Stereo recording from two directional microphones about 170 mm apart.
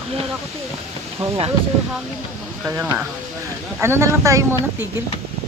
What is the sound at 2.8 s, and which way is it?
Speech, 10° right (ahead or behind).